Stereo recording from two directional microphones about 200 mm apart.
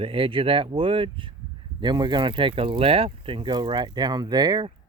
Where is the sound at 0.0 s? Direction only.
25° right (ahead or behind).